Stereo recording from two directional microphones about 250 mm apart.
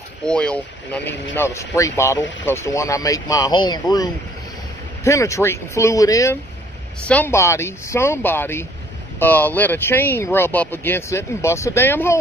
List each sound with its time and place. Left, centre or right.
0.2 s speech: centre